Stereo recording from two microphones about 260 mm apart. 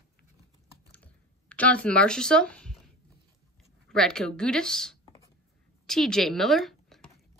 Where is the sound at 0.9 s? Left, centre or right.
Centre.